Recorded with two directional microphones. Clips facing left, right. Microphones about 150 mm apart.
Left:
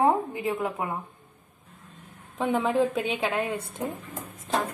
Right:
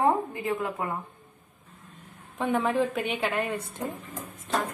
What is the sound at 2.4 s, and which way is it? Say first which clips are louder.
A woman's voice: left 1 dB; 20° left (ahead or behind).